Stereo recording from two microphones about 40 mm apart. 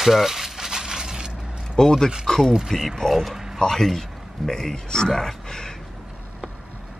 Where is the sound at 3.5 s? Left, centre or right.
Centre.